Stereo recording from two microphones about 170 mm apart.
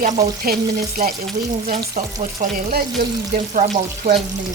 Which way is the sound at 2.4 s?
50° right (ahead or behind).